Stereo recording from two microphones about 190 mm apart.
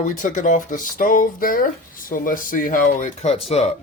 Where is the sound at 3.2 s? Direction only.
30° left (ahead or behind).